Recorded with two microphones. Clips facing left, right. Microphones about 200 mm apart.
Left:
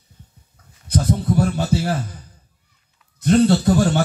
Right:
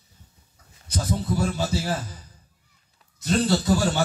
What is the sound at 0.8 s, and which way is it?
Speech, 60° left (ahead or behind).